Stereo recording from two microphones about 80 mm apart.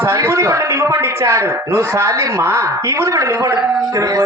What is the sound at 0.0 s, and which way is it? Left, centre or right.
Speech, right.